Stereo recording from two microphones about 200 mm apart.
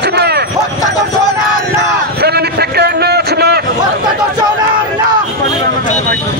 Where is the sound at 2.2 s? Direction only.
55° right (ahead or behind).